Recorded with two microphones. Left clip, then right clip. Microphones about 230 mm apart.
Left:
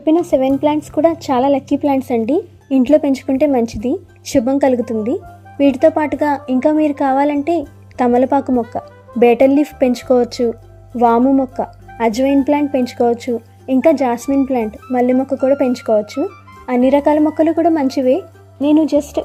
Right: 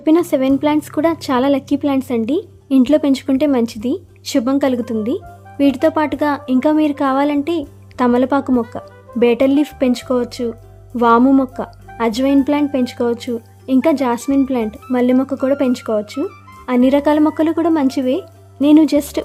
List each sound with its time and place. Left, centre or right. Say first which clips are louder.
0.0 s a woman's voice: left 1 dB; centre
18.6 s a woman's voice: right 2 dB; centre